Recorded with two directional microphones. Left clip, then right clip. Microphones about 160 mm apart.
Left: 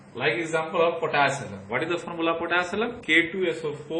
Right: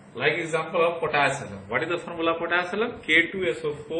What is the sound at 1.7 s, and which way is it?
A man's voice, 45° left (ahead or behind).